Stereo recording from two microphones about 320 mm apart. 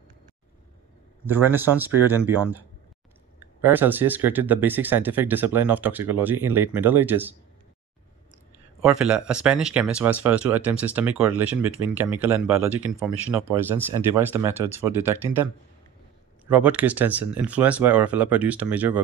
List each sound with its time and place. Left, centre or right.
1.2 s speech: centre
8.8 s speech: centre
16.4 s speech: centre